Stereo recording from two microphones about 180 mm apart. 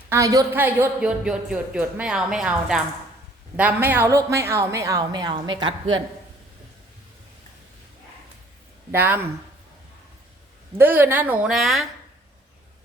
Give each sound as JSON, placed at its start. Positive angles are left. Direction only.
{"t": 0.1, "sound": "speech", "side_deg": -20}
{"t": 8.9, "sound": "speech", "side_deg": -10}
{"t": 10.8, "sound": "speech", "side_deg": -10}